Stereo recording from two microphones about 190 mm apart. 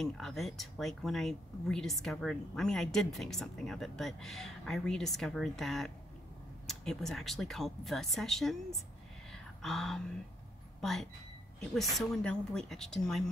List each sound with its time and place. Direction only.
0.0 s speech: centre (ahead or behind)
9.3 s a sound: centre (ahead or behind)
10.8 s speech: centre (ahead or behind)